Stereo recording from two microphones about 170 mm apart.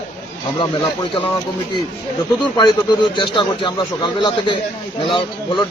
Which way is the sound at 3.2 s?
30° left (ahead or behind).